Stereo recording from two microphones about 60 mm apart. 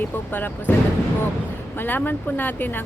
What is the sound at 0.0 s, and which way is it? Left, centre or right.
Speech, left.